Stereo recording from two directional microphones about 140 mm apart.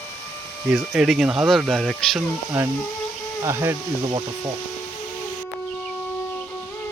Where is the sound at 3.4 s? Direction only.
20° right (ahead or behind).